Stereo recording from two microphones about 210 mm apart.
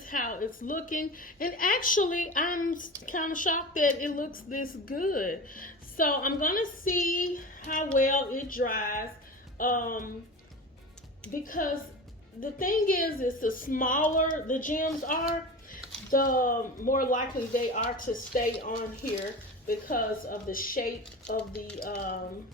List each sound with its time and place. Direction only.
0.0 s a woman's voice: 40° left (ahead or behind)
11.3 s a woman's voice: 40° left (ahead or behind)